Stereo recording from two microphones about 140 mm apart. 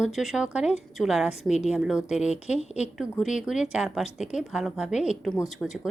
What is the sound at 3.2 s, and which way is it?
Speech, 5° right (ahead or behind).